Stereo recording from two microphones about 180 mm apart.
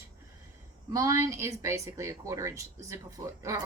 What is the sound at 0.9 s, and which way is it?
Speech, 15° right (ahead or behind).